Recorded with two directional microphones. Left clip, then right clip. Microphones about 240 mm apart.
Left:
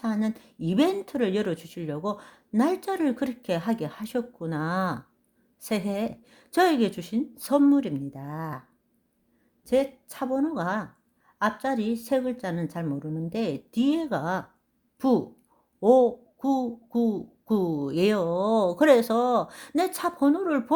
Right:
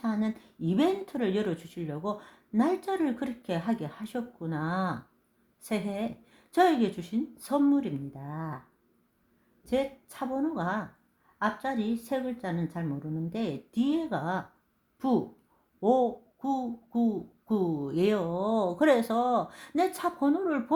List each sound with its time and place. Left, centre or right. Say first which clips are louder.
0.0 s a child's voice: left 3 dB; left
9.6 s a child's voice: left 5 dB; left